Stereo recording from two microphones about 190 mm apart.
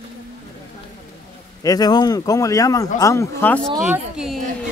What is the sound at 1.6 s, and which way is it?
Speech, 20° left (ahead or behind).